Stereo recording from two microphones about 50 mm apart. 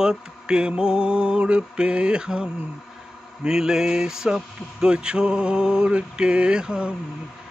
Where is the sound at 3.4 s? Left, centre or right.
Centre.